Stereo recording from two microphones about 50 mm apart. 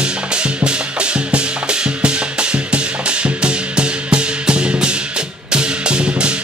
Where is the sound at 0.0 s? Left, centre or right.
Centre.